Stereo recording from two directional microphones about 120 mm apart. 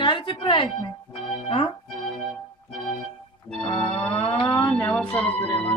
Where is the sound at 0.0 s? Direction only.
45° left (ahead or behind).